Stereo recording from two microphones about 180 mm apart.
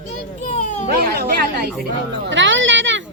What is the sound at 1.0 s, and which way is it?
Speech, 60° right (ahead or behind).